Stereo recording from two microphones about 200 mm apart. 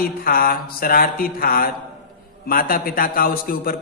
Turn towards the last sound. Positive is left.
turn(degrees=45)  # may be behind; listen again after turning